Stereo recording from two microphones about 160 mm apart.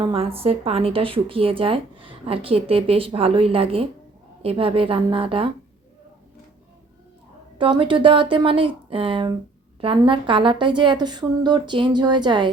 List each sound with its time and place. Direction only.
0.0 s a woman's voice: 35° right (ahead or behind)
7.6 s a woman's voice: 30° right (ahead or behind)